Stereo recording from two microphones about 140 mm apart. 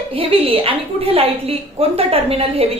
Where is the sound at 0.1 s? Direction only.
40° right (ahead or behind).